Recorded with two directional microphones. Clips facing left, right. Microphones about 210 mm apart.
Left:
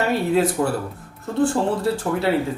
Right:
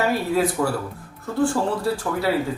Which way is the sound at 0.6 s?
25° left (ahead or behind).